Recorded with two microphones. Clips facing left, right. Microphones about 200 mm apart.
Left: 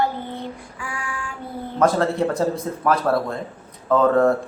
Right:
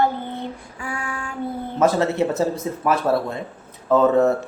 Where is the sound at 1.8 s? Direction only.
5° right (ahead or behind).